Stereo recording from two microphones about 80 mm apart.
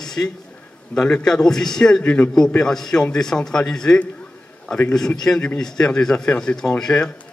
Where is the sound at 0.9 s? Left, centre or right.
Centre.